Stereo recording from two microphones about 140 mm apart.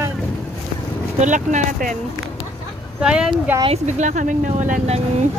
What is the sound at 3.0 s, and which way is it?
Speech, 5° right (ahead or behind).